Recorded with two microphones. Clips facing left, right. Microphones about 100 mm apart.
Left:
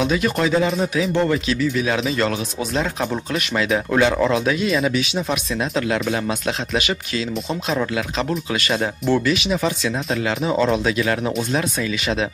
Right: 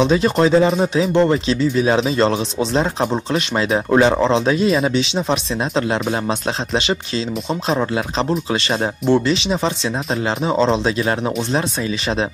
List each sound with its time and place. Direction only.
0.0 s speech: 30° right (ahead or behind)